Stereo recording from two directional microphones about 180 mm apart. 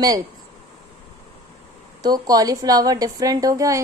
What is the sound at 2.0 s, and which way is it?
A woman's voice, 20° right (ahead or behind).